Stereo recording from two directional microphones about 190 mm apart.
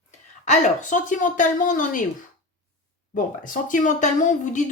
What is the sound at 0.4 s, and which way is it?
A woman's voice, 40° left (ahead or behind).